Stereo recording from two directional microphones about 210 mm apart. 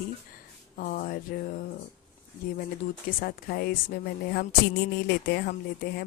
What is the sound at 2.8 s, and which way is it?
Speech, 40° left (ahead or behind).